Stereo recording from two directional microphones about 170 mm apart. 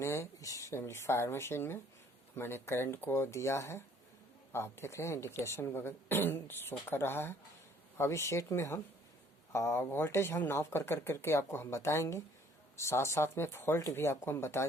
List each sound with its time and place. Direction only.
0.0 s speech: 15° left (ahead or behind)